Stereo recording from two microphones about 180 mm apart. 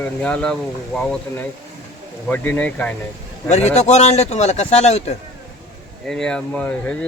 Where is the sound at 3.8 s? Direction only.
40° left (ahead or behind).